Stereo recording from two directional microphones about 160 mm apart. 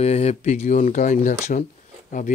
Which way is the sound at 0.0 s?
40° left (ahead or behind).